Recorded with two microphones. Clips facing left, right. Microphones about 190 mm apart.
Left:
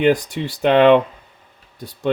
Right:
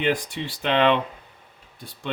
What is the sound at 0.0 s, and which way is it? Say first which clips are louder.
Speech: left 8 dB; 40° left (ahead or behind).